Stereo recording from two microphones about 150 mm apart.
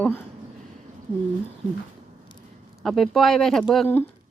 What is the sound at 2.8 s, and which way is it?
Speech, centre (ahead or behind).